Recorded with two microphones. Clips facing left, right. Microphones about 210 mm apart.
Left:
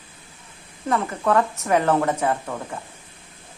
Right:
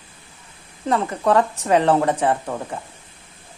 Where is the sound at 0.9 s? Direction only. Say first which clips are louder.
Right 2 dB; 35° right (ahead or behind).